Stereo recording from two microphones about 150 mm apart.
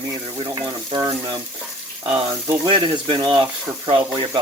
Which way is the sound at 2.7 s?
30° right (ahead or behind).